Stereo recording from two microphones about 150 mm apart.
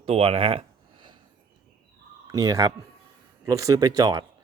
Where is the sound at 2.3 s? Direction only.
20° right (ahead or behind).